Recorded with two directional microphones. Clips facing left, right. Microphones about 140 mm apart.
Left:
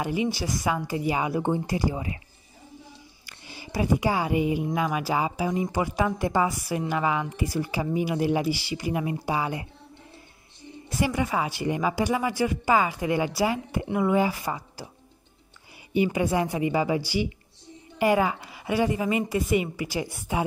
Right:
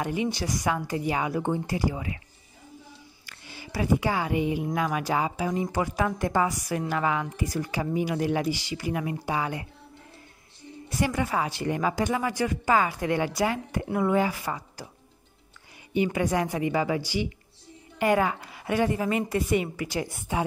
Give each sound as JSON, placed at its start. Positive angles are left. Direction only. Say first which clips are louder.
{"t": 0.0, "sound": "speech", "louder": "left 1 dB", "side_deg": 5}
{"t": 1.9, "sound": "speech", "louder": "left 1 dB", "side_deg": 25}
{"t": 3.3, "sound": "speech", "louder": "left 1 dB", "side_deg": 20}
{"t": 11.0, "sound": "a woman's voice", "louder": "left 1 dB", "side_deg": 5}
{"t": 15.9, "sound": "speech", "louder": "left 1 dB", "side_deg": 15}